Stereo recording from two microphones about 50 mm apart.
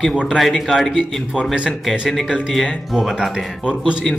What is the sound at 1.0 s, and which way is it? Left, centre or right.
Speech, centre.